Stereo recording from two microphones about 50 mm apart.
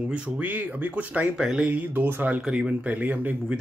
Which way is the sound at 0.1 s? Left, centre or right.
Right.